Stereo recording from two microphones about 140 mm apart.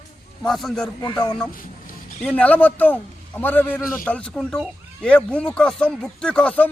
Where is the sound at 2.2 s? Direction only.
10° left (ahead or behind).